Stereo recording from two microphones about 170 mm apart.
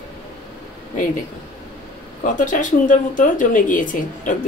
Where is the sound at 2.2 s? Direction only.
50° left (ahead or behind).